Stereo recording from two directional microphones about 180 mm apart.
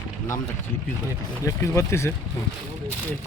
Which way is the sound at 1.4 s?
15° left (ahead or behind).